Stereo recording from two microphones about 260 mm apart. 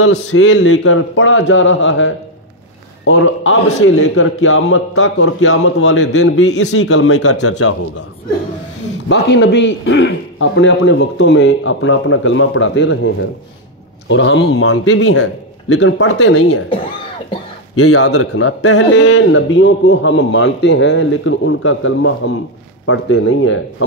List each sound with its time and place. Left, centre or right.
0.0 s a man's voice: left
9.1 s a man's voice: left
14.6 s speech: left
17.7 s a man's voice: left